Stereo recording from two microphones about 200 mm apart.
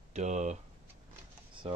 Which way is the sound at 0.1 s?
35° right (ahead or behind).